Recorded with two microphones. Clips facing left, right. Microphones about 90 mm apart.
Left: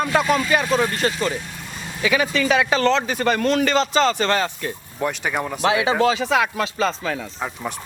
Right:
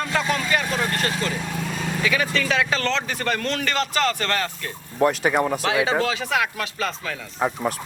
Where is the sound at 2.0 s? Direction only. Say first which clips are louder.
Left 4 dB; 20° left (ahead or behind).